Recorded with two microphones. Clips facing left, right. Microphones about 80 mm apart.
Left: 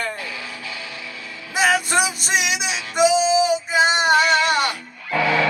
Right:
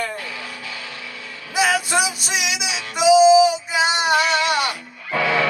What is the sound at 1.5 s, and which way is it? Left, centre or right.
Music, left.